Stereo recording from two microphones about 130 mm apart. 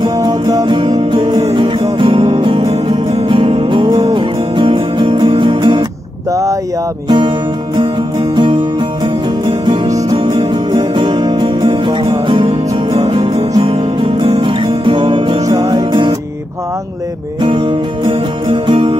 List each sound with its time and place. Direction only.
0.0 s music: 30° right (ahead or behind)
7.1 s music: 35° right (ahead or behind)
9.8 s music: 25° right (ahead or behind)
10.1 s music: 40° right (ahead or behind)
17.4 s music: 40° right (ahead or behind)